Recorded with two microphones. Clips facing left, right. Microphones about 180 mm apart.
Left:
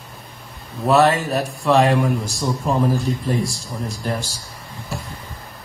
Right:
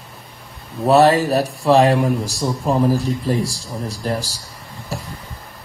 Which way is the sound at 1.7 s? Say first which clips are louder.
Right 2 dB; 35° right (ahead or behind).